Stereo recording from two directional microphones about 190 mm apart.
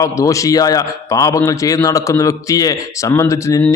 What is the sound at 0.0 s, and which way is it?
A man's voice, 15° left (ahead or behind).